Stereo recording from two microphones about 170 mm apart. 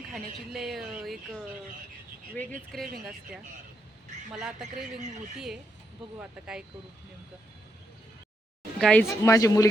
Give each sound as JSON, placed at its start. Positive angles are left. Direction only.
{"t": 0.1, "sound": "speech", "side_deg": 0}
{"t": 2.4, "sound": "speech", "side_deg": 10}
{"t": 3.0, "sound": "speech", "side_deg": -5}
{"t": 6.1, "sound": "speech", "side_deg": -5}
{"t": 8.8, "sound": "speech", "side_deg": 5}
{"t": 9.0, "sound": "speech", "side_deg": 20}